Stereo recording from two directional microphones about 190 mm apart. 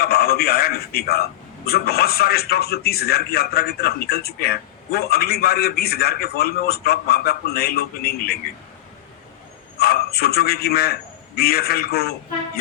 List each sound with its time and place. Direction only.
0.0 s a man's voice: 55° left (ahead or behind)
9.7 s a man's voice: 55° left (ahead or behind)